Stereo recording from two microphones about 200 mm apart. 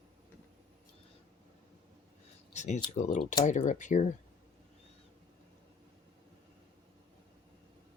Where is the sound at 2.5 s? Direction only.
35° left (ahead or behind).